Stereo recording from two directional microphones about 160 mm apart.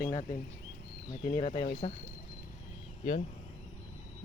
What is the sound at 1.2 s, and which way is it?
Speech, 45° left (ahead or behind).